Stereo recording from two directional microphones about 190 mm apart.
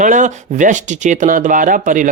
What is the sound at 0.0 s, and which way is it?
Speech, 40° right (ahead or behind).